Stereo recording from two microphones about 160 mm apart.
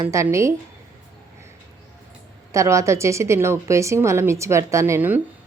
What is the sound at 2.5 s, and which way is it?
Speech, 20° right (ahead or behind).